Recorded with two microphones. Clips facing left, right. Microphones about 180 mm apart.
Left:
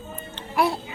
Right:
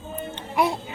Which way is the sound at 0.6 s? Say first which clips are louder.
Even; 20° right (ahead or behind).